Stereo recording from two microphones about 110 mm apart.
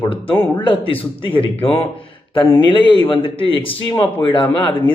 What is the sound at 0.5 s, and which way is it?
A man's voice, 50° left (ahead or behind).